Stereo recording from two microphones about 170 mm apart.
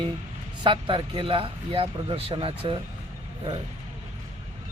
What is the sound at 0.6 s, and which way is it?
Speech, 30° right (ahead or behind).